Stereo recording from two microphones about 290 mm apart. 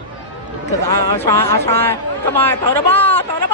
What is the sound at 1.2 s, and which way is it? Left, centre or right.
Speech, centre.